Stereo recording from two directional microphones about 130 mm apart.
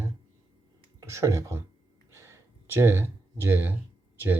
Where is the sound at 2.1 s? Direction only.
20° right (ahead or behind).